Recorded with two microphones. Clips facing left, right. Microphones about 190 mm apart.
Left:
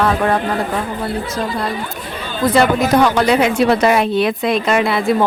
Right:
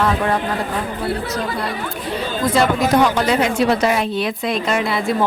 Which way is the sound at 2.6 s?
65° left (ahead or behind).